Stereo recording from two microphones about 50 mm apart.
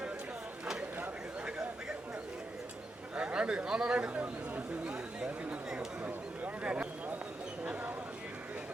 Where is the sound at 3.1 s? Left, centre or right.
Right.